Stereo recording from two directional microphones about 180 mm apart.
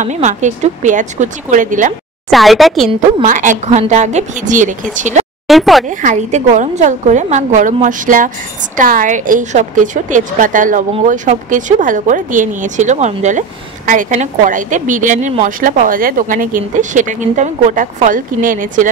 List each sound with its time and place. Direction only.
0.0 s a woman's voice: 40° right (ahead or behind)
2.3 s a woman's voice: centre (ahead or behind)
3.3 s a woman's voice: 45° right (ahead or behind)
5.5 s a woman's voice: centre (ahead or behind)
5.9 s a woman's voice: 45° right (ahead or behind)